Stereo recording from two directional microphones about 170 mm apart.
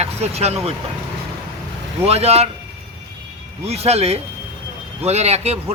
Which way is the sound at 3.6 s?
40° right (ahead or behind).